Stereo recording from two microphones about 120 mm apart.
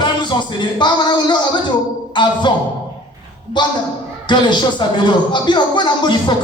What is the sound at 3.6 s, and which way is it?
Speech, 40° left (ahead or behind).